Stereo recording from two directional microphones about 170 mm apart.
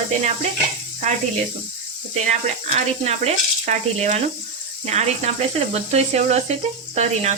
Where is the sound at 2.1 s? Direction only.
40° right (ahead or behind).